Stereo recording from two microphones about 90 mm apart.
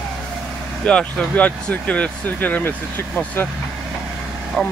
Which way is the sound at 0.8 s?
10° left (ahead or behind).